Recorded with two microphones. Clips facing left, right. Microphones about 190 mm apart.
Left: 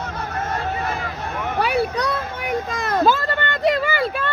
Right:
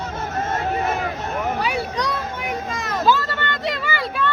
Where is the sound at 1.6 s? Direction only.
60° left (ahead or behind).